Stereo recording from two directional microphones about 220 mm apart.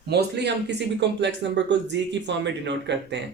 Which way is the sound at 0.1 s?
50° right (ahead or behind).